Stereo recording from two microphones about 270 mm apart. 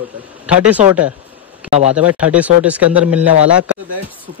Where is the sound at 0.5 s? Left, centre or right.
Centre.